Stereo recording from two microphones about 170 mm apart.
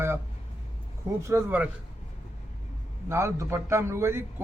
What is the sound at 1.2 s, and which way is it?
Speech, 10° right (ahead or behind).